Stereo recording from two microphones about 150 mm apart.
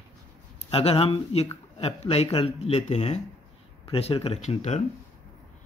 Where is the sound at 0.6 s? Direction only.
40° left (ahead or behind).